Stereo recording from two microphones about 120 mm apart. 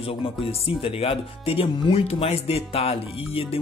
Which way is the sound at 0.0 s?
50° left (ahead or behind).